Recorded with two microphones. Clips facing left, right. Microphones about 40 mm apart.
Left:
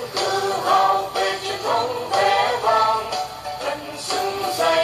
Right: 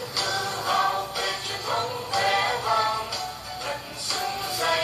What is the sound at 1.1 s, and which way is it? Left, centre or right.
Music, left.